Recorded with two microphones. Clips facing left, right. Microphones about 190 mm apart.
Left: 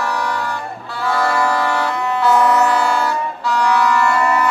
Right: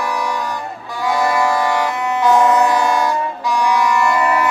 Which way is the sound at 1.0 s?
15° right (ahead or behind).